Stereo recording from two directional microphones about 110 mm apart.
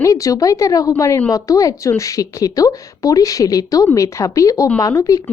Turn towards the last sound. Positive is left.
turn(degrees=30)  # may be behind; listen again after turning